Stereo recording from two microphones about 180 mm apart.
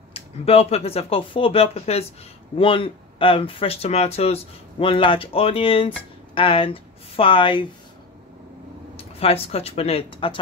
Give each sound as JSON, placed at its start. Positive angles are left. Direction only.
{"t": 0.1, "sound": "speech", "side_deg": 35}
{"t": 8.9, "sound": "speech", "side_deg": 35}